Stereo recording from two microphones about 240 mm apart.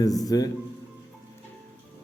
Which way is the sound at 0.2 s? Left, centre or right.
Centre.